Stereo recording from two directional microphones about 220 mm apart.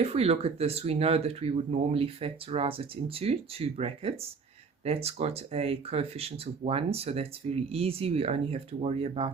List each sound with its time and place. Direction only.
0.0 s speech: 25° right (ahead or behind)